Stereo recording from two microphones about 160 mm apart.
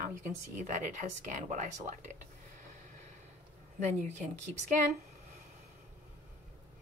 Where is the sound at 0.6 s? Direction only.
55° right (ahead or behind).